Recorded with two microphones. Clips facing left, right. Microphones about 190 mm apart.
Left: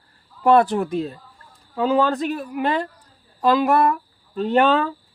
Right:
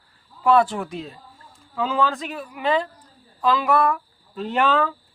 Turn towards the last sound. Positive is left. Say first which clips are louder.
# left 5 dB
turn(degrees=35)  # may be behind; listen again after turning